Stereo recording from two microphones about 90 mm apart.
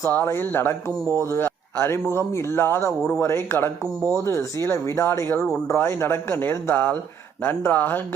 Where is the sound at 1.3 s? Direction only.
25° left (ahead or behind).